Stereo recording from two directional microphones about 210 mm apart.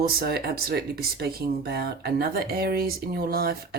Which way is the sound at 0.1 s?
45° right (ahead or behind).